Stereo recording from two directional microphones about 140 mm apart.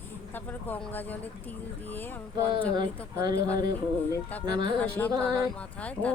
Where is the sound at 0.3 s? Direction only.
10° left (ahead or behind).